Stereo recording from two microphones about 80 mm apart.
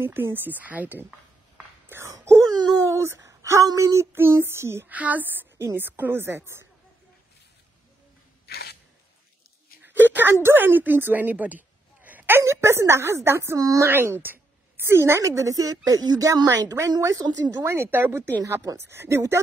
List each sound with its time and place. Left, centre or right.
0.0 s a woman's voice: right
1.9 s speech: right
2.1 s wail: right
3.2 s a woman's voice: right
4.9 s a woman's voice: centre
10.1 s a woman's voice: right
12.4 s a woman's voice: right
13.8 s a woman's voice: right
17.6 s a woman's voice: right